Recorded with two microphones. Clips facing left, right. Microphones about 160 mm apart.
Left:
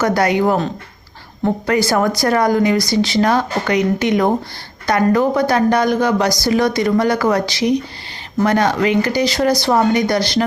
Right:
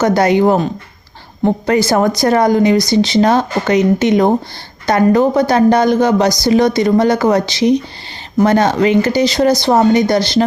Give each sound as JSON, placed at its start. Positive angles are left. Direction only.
{"t": 0.0, "sound": "speech", "side_deg": -25}